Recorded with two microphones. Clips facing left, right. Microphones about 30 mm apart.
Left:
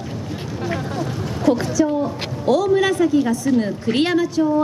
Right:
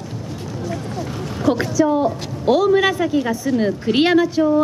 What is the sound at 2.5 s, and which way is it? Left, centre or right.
A woman's voice, centre.